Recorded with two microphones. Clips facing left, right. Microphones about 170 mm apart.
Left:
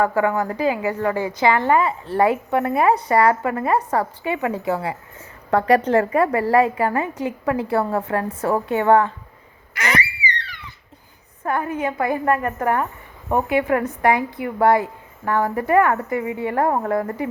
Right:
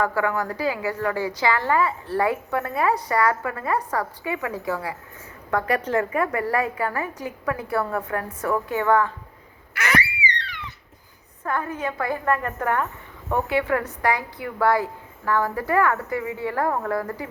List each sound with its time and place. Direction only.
0.0 s a woman's voice: 20° left (ahead or behind)
11.4 s a woman's voice: 15° left (ahead or behind)